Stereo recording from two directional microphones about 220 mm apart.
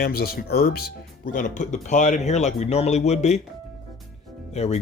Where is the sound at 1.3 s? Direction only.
35° left (ahead or behind).